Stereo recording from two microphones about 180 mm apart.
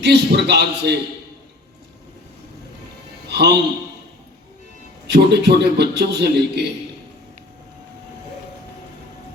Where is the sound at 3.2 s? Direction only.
70° right (ahead or behind).